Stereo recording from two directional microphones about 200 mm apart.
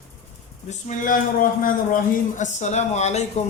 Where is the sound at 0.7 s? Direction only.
40° left (ahead or behind).